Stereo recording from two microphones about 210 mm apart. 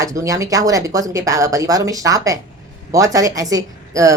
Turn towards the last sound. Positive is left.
turn(degrees=-15)  # may be behind; listen again after turning